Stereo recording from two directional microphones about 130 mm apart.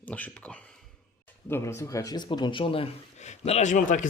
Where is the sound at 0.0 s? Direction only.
10° left (ahead or behind); by 2.9 s 45° left (ahead or behind).